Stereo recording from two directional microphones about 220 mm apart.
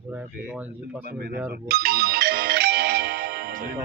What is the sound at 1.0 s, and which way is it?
Speech, 45° right (ahead or behind).